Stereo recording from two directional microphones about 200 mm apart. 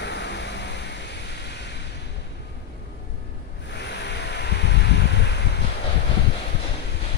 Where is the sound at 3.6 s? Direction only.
60° left (ahead or behind).